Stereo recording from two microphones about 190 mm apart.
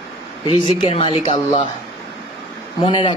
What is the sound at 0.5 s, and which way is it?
Speech, 25° left (ahead or behind).